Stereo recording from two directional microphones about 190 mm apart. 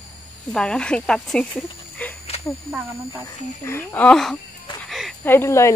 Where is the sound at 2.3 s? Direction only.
35° left (ahead or behind).